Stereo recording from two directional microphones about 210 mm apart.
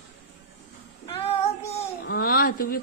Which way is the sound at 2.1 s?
45° left (ahead or behind).